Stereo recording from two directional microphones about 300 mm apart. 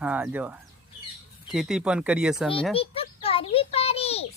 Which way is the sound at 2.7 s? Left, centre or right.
Centre.